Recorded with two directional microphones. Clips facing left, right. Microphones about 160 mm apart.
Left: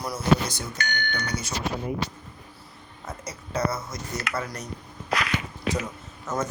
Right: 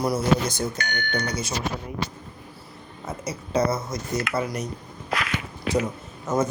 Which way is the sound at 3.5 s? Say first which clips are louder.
Right 4 dB; 20° right (ahead or behind).